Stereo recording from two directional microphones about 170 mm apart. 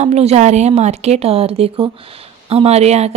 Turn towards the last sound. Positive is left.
turn(degrees=-40)  # may be behind; listen again after turning